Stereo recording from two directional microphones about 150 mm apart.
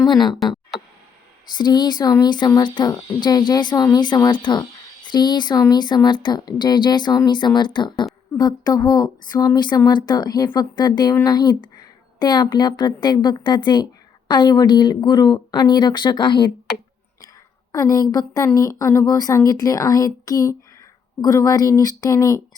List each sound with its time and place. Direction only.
0.1 s speech: 30° left (ahead or behind)
0.7 s tick: centre (ahead or behind)
1.5 s speech: 30° left (ahead or behind)
17.7 s speech: 20° left (ahead or behind)